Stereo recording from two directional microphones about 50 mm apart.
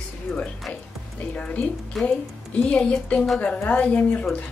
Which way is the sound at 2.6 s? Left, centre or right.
Left.